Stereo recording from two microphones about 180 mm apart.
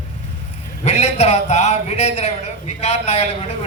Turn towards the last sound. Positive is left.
turn(degrees=35)  # may be behind; listen again after turning